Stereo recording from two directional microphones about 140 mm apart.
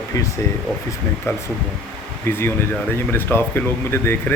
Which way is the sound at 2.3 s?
15° left (ahead or behind).